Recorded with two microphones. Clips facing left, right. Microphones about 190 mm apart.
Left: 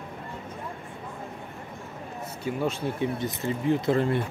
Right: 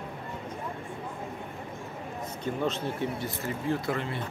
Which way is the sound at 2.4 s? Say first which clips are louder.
Left 2 dB; 10° left (ahead or behind).